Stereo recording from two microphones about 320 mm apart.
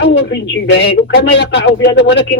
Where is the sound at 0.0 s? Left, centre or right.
Left.